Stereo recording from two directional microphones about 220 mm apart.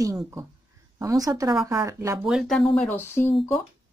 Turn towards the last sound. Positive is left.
turn(degrees=10)  # may be behind; listen again after turning